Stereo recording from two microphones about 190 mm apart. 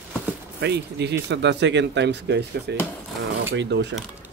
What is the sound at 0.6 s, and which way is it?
Speech, 65° right (ahead or behind).